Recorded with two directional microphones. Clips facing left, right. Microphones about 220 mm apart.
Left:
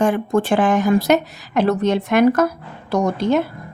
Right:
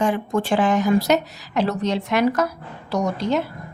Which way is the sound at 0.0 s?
50° left (ahead or behind).